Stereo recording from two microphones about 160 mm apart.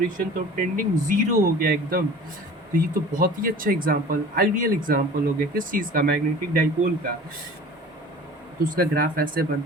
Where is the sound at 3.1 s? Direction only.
60° right (ahead or behind).